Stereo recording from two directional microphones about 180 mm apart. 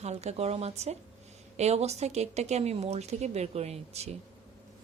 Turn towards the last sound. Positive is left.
turn(degrees=-35)  # may be behind; listen again after turning